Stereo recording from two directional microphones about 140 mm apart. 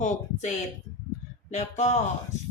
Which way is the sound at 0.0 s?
60° left (ahead or behind).